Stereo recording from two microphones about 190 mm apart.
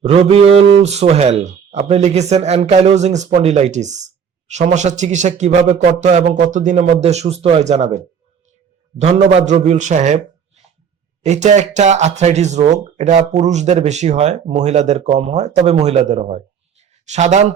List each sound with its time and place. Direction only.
0.1 s speech: 30° right (ahead or behind)